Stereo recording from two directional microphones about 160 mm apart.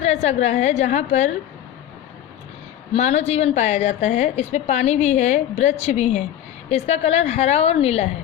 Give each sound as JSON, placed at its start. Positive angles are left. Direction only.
{"t": 0.0, "sound": "a woman's voice", "side_deg": 45}
{"t": 2.9, "sound": "a woman's voice", "side_deg": 45}